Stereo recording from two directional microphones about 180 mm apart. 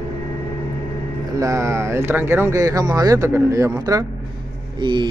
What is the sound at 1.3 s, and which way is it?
Speech, 15° right (ahead or behind).